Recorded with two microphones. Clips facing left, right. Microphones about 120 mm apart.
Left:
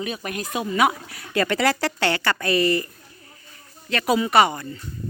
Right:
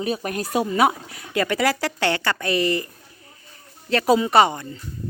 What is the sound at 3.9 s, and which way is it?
Speech, 30° right (ahead or behind).